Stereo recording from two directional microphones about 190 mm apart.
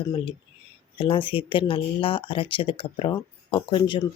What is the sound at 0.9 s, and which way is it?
Speech, 25° left (ahead or behind).